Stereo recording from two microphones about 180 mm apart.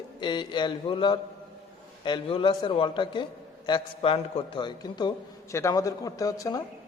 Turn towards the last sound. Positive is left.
turn(degrees=20)  # may be behind; listen again after turning